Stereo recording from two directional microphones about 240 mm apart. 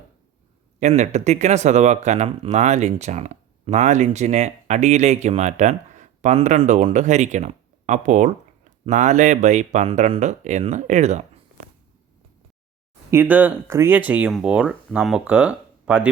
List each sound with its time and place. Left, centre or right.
0.8 s speech: right
13.1 s speech: centre